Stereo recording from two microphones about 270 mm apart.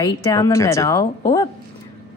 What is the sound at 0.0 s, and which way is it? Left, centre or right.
Speech, centre.